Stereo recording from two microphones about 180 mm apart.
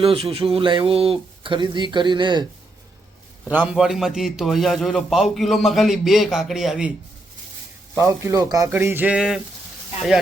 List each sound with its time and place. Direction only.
0.0 s speech: 30° right (ahead or behind)
3.5 s a man's voice: 5° right (ahead or behind)
7.9 s speech: 15° right (ahead or behind)